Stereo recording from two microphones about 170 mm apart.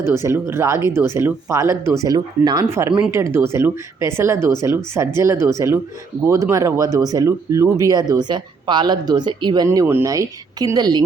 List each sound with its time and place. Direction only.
0.0 s speech: 15° right (ahead or behind)